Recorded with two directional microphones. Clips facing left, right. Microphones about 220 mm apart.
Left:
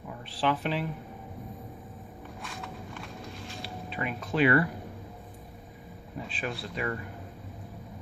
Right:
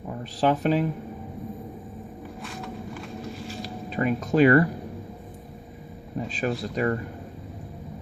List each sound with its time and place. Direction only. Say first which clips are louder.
0.2 s speech: right 6 dB; 40° right (ahead or behind)
3.6 s speech: right 8 dB; 40° right (ahead or behind)
6.1 s speech: right 8 dB; 40° right (ahead or behind)